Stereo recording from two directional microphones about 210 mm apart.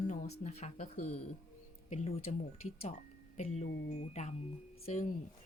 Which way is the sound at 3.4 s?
35° left (ahead or behind).